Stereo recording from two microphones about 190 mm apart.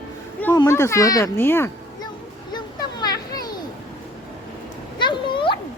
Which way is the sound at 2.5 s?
20° left (ahead or behind).